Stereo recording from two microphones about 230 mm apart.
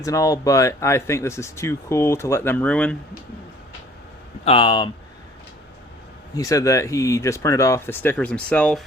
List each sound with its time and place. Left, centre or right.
0.0 s speech: centre
4.4 s speech: left
6.3 s speech: centre